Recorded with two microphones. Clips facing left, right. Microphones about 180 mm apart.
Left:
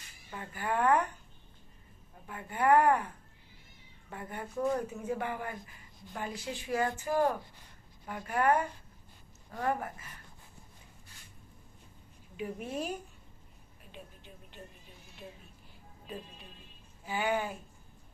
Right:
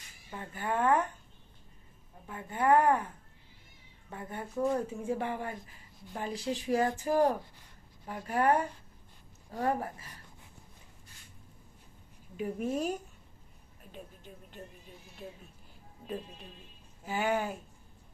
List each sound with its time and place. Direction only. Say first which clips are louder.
0.3 s speech: even; 20° right (ahead or behind)
2.2 s speech: even; 20° right (ahead or behind)
4.1 s speech: right 1 dB; 25° right (ahead or behind)
12.6 s speech: right 6 dB; 45° right (ahead or behind)
17.1 s speech: right 1 dB; 40° right (ahead or behind)